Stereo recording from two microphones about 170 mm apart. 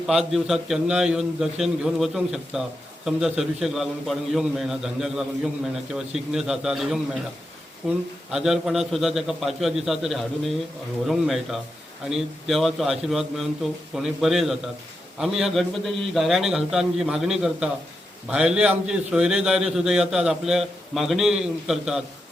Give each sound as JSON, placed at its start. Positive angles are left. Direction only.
{"t": 0.1, "sound": "a man's voice", "side_deg": 0}